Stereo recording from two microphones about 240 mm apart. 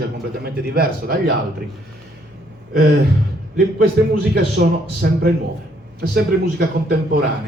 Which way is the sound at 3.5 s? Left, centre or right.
Right.